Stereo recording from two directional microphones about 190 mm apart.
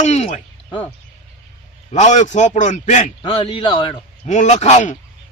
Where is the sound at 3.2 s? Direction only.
25° left (ahead or behind).